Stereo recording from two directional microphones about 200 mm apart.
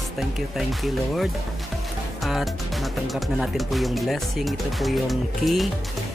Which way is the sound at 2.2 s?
Centre (ahead or behind).